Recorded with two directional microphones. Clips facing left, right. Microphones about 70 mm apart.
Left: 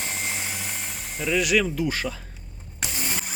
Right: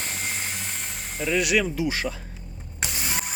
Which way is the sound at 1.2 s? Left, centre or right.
Centre.